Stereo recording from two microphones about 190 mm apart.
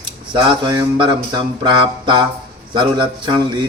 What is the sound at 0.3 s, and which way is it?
A man's voice, 20° right (ahead or behind).